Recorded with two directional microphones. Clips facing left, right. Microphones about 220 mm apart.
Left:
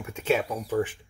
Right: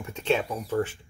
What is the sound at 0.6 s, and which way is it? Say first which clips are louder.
Speech: left 1 dB; 15° left (ahead or behind).